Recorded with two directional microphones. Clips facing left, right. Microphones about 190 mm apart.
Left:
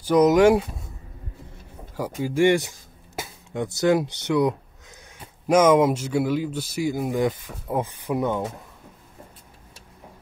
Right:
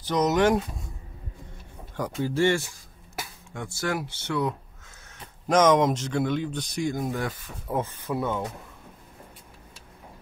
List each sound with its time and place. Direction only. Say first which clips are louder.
0.0 s speech: left 6 dB; 10° left (ahead or behind)
2.0 s speech: left 3 dB; 10° left (ahead or behind)